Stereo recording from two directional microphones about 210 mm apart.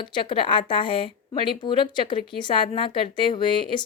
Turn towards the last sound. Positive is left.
turn(degrees=25)  # may be behind; listen again after turning